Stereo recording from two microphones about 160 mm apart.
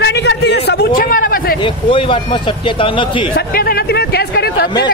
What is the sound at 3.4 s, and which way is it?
Speech, 70° left (ahead or behind).